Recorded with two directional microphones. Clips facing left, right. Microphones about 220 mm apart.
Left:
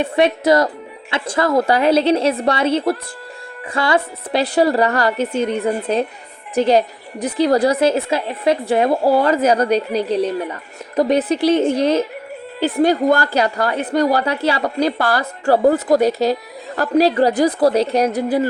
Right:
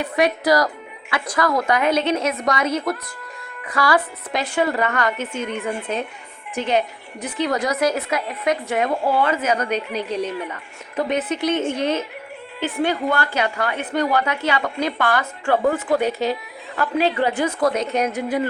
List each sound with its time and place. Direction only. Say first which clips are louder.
0.0 s a woman's voice: left 4 dB; 25° left (ahead or behind)